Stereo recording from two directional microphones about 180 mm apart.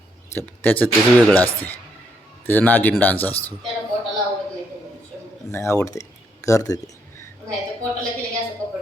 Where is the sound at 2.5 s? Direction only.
10° left (ahead or behind).